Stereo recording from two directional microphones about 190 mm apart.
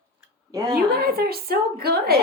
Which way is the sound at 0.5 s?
20° right (ahead or behind).